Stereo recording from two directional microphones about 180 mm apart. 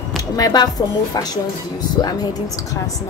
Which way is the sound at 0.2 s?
20° left (ahead or behind).